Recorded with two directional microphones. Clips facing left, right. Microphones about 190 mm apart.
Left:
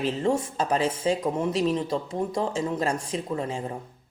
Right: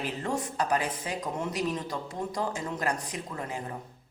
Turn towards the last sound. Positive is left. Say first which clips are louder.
# left 7 dB
turn(degrees=25)  # may be behind; listen again after turning